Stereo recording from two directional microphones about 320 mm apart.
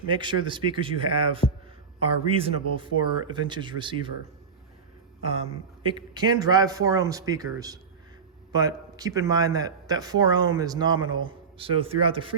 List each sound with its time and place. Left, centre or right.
0.1 s speech: centre
5.8 s speech: centre